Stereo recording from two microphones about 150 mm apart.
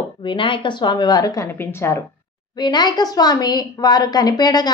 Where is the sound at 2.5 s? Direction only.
30° left (ahead or behind).